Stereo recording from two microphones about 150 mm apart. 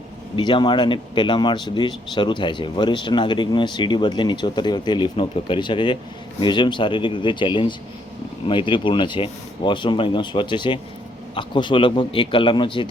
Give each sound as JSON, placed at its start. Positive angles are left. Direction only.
{"t": 0.3, "sound": "speech", "side_deg": 30}